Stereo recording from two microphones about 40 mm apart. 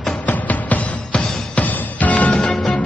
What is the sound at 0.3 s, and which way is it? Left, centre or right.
Music, left.